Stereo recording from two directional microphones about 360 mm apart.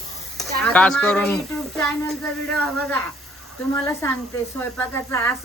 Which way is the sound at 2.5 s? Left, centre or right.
Centre.